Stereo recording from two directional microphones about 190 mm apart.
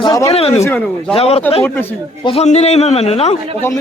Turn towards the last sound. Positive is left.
turn(degrees=35)  # may be behind; listen again after turning